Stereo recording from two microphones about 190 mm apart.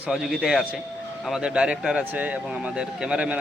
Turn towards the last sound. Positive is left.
turn(degrees=-5)  # may be behind; listen again after turning